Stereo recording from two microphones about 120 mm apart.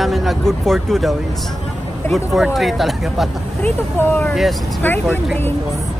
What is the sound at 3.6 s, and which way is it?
Speech, 15° left (ahead or behind).